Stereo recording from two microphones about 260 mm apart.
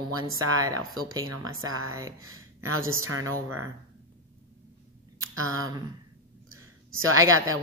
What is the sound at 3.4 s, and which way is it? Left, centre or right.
Speech, right.